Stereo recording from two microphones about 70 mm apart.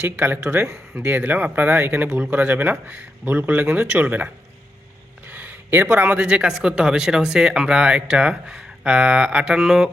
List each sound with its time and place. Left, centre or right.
0.0 s speech: right
5.3 s speech: right; by 9.9 s centre